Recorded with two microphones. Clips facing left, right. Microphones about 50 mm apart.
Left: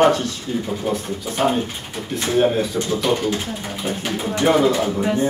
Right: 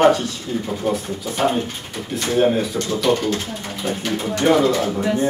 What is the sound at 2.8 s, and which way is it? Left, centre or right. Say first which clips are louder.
Speech: right 1 dB; centre.